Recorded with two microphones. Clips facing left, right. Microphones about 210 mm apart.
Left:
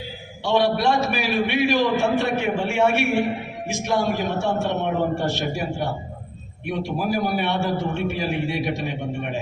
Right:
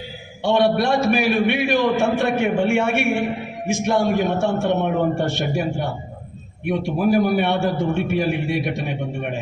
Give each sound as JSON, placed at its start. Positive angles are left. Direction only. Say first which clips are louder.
{"t": 0.4, "sound": "a man's voice", "louder": "right 2 dB", "side_deg": -55}
{"t": 6.7, "sound": "a man's voice", "louder": "right 5 dB", "side_deg": -50}